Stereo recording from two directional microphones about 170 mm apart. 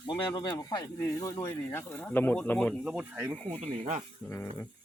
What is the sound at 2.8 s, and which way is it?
Speech, 5° right (ahead or behind).